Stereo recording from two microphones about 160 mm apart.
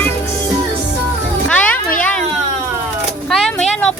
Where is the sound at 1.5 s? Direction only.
10° left (ahead or behind).